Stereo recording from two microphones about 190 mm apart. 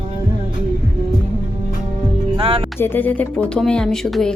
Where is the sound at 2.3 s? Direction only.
30° right (ahead or behind).